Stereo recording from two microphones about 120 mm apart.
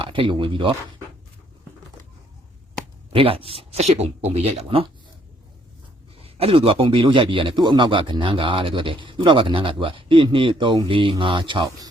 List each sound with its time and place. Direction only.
0.0 s speech: 45° right (ahead or behind)
3.1 s speech: 50° right (ahead or behind)
6.2 s a man's voice: 55° right (ahead or behind)